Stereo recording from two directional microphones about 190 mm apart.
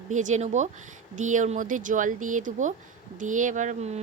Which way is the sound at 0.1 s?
40° right (ahead or behind).